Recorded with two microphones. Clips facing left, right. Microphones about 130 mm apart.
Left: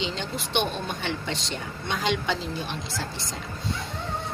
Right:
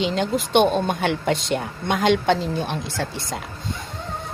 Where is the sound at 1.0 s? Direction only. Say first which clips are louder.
Right 9 dB; 55° right (ahead or behind).